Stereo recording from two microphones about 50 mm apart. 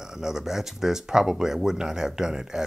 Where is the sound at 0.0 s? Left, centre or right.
Centre.